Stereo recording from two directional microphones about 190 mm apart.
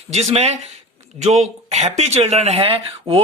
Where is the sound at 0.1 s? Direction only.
35° right (ahead or behind).